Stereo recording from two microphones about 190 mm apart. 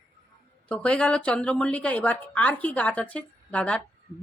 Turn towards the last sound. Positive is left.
turn(degrees=5)  # may be behind; listen again after turning